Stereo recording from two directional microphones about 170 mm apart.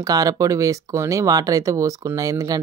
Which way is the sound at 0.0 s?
20° right (ahead or behind).